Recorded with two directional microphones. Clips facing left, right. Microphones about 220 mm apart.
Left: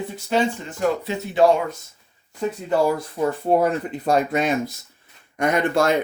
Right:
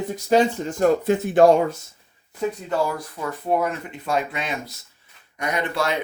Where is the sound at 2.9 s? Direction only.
30° left (ahead or behind).